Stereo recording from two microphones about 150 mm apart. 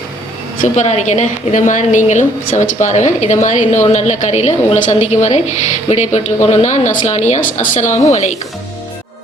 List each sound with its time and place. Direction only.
0.6 s a woman's voice: 50° left (ahead or behind)